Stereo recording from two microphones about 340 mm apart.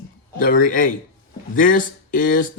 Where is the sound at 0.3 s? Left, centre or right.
Left.